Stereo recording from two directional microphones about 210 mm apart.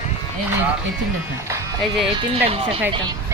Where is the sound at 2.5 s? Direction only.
25° right (ahead or behind).